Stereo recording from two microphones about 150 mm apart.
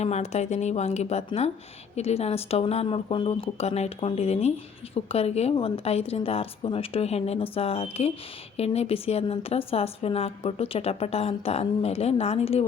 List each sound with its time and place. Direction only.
0.0 s a woman's voice: 45° left (ahead or behind)